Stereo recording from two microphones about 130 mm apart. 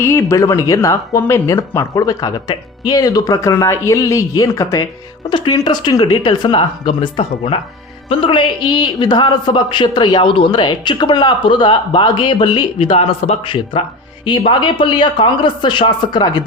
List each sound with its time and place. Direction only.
0.0 s a man's voice: 20° left (ahead or behind); by 16.4 s 35° left (ahead or behind)